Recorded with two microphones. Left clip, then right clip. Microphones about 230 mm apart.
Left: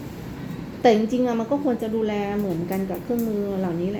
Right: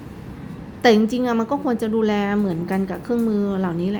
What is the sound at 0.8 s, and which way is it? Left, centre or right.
A woman's voice, right.